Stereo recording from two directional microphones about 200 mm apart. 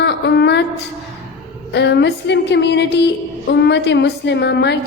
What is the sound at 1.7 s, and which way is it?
A woman's voice, 60° left (ahead or behind).